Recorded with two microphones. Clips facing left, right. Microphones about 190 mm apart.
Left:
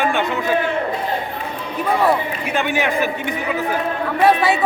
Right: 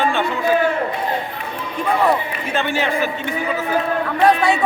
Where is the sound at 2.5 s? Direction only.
15° left (ahead or behind).